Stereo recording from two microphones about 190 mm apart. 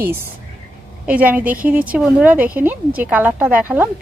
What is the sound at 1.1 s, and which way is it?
A woman's voice, 5° right (ahead or behind).